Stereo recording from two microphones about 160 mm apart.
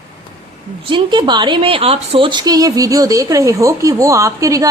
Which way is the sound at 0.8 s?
30° right (ahead or behind).